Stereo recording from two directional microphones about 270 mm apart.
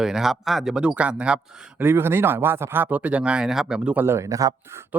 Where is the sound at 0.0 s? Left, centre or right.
Centre.